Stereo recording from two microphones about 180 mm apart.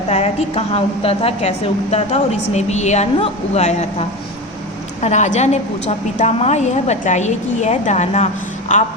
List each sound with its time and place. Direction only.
0.1 s a woman's voice: 35° left (ahead or behind)
5.0 s a woman's voice: 40° left (ahead or behind)